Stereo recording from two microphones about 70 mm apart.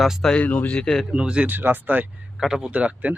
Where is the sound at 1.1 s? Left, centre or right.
Centre.